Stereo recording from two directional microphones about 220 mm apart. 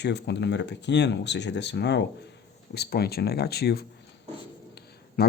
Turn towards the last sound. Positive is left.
turn(degrees=45)  # may be behind; listen again after turning